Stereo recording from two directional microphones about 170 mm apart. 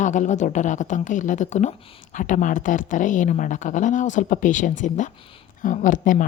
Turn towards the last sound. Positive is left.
turn(degrees=50)  # may be behind; listen again after turning